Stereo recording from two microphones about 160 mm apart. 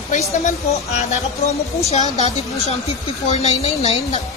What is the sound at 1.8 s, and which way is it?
A woman's voice, 45° left (ahead or behind).